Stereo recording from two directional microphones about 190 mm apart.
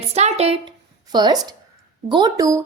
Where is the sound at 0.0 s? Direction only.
35° right (ahead or behind).